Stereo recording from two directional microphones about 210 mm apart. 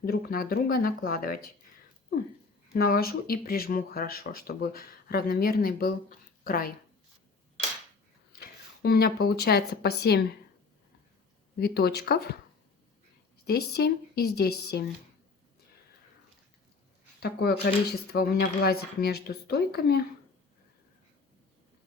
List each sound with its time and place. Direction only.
0.0 s speech: 45° left (ahead or behind)
2.7 s speech: 45° left (ahead or behind)
8.3 s speech: 45° left (ahead or behind)
11.6 s speech: 50° left (ahead or behind)
13.4 s speech: 50° left (ahead or behind)
17.2 s speech: 50° left (ahead or behind)